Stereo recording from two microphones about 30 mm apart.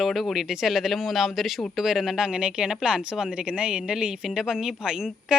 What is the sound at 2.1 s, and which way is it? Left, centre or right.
A woman's voice, right.